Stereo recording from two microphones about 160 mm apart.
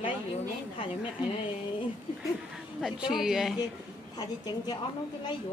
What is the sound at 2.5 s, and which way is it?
Speech, centre (ahead or behind).